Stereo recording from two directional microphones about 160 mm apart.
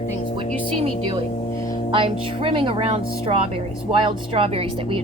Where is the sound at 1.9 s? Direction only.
35° right (ahead or behind).